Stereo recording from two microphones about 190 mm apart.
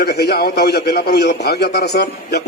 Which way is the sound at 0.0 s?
60° left (ahead or behind).